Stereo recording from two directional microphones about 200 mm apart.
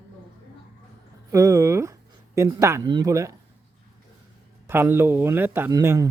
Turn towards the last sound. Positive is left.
turn(degrees=-15)  # may be behind; listen again after turning